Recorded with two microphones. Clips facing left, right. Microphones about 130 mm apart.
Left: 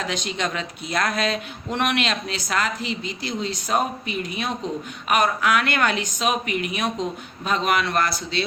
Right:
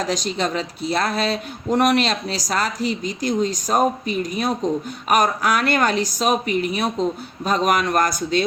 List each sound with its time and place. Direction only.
0.0 s speech: 40° right (ahead or behind)